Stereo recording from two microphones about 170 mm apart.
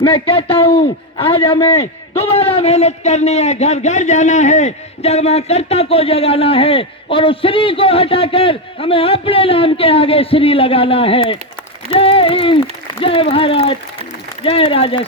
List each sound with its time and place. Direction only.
0.0 s a man's voice: 30° left (ahead or behind)